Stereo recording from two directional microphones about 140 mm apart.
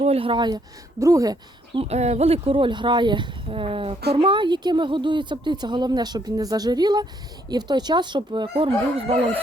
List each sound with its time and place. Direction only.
0.0 s speech: 45° right (ahead or behind); by 1.8 s 25° right (ahead or behind)
1.8 s speech: 50° right (ahead or behind)